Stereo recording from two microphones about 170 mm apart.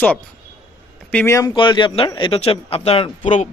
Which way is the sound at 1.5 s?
25° left (ahead or behind).